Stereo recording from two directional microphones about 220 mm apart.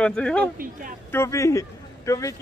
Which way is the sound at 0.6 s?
40° right (ahead or behind).